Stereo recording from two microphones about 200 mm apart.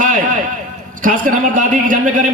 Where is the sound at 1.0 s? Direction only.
40° right (ahead or behind).